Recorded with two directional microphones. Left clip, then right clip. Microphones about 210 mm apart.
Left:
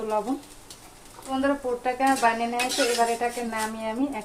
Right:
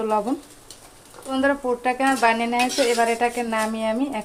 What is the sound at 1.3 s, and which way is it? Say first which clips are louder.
Speech: right 4 dB; 30° right (ahead or behind).